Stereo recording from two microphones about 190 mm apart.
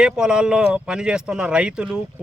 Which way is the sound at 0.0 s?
5° right (ahead or behind).